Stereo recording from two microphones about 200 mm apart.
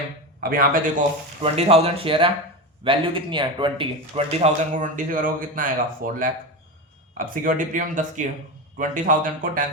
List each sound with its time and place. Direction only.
0.5 s speech: 45° right (ahead or behind)
1.4 s speech: 30° right (ahead or behind)